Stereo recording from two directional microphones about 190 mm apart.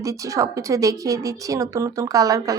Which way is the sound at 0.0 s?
15° right (ahead or behind).